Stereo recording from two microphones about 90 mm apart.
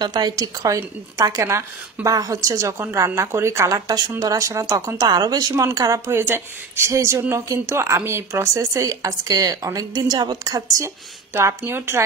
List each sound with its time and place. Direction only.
0.0 s a woman's voice: 50° right (ahead or behind)
6.1 s speech: 25° right (ahead or behind)
11.3 s speech: 25° right (ahead or behind)